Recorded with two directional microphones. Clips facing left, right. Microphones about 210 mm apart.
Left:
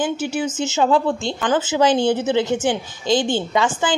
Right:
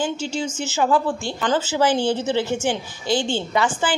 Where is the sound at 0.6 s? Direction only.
25° left (ahead or behind).